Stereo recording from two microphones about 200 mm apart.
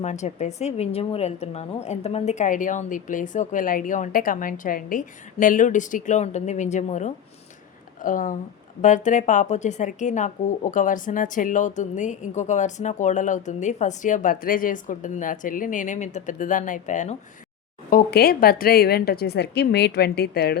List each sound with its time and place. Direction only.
0.0 s a woman's voice: 35° left (ahead or behind)
17.9 s a woman's voice: 50° left (ahead or behind)